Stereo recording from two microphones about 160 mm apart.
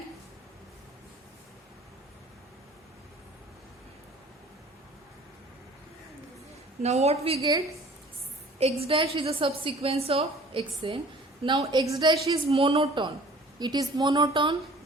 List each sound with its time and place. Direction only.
6.8 s a woman's voice: 45° right (ahead or behind)
8.5 s a woman's voice: 40° right (ahead or behind)
12.5 s a woman's voice: 35° right (ahead or behind)